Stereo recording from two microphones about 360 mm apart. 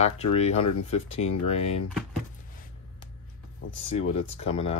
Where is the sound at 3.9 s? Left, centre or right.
Centre.